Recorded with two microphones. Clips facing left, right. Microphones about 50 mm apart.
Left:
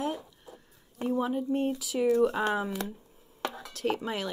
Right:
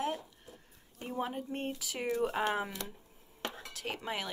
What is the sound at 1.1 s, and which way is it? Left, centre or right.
Speech, right.